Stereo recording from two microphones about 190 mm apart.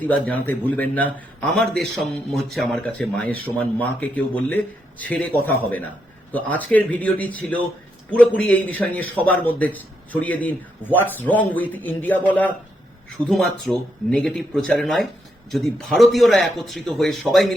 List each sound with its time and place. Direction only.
0.0 s a man's voice: 10° left (ahead or behind)